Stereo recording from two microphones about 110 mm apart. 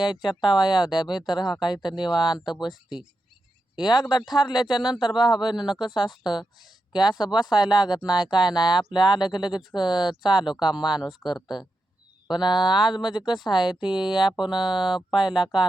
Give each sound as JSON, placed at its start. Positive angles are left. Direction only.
{"t": 0.0, "sound": "speech", "side_deg": 45}
{"t": 3.8, "sound": "speech", "side_deg": 40}
{"t": 11.0, "sound": "speech", "side_deg": -5}
{"t": 11.3, "sound": "speech", "side_deg": 40}
{"t": 14.3, "sound": "speech", "side_deg": -5}